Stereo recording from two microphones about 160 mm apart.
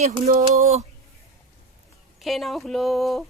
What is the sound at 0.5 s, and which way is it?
Speech, 45° right (ahead or behind).